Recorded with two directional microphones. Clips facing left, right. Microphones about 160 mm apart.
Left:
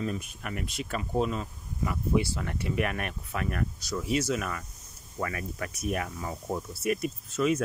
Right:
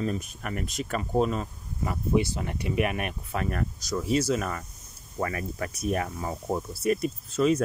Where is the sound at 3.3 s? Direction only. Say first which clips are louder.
Right 1 dB; 35° right (ahead or behind).